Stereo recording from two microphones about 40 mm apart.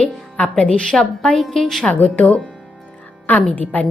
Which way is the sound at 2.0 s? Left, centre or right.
Left.